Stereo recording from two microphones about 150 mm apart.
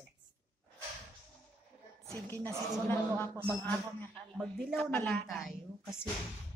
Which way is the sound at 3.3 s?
20° right (ahead or behind).